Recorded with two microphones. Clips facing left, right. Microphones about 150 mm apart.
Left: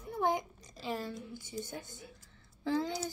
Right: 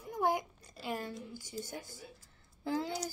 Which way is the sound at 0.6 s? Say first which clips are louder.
Left 1 dB; 10° right (ahead or behind).